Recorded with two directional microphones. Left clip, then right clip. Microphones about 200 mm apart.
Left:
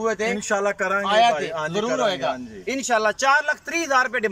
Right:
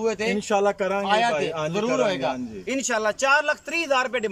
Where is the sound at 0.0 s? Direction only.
5° right (ahead or behind).